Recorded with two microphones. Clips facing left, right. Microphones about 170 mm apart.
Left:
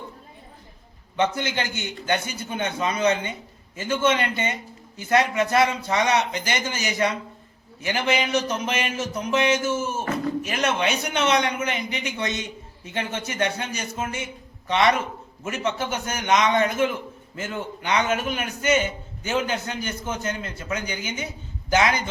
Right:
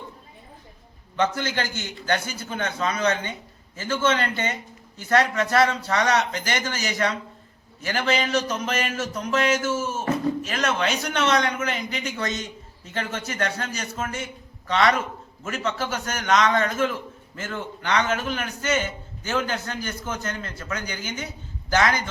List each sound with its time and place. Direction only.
1.1 s a man's voice: 15° left (ahead or behind)